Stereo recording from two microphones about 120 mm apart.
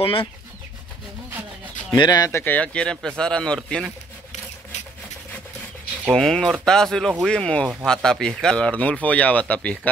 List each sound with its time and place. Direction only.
0.0 s speech: 50° left (ahead or behind)
2.0 s speech: 35° left (ahead or behind)
2.4 s speech: 10° left (ahead or behind)
6.1 s speech: 5° left (ahead or behind)